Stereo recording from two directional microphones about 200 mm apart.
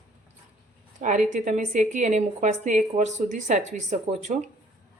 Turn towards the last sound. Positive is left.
turn(degrees=-35)  # may be behind; listen again after turning